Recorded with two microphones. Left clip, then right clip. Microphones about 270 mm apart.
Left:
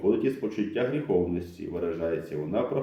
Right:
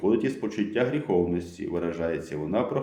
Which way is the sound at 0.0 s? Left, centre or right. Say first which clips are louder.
Even; right.